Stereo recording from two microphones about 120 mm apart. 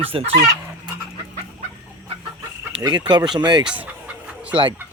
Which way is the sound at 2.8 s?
35° right (ahead or behind).